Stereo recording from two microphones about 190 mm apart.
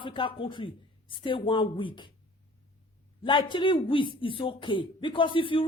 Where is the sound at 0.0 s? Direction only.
25° left (ahead or behind).